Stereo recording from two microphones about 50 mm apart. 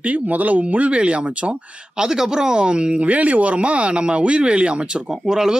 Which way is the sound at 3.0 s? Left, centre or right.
Right.